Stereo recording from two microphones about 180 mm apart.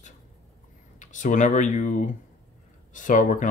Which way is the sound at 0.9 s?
45° left (ahead or behind).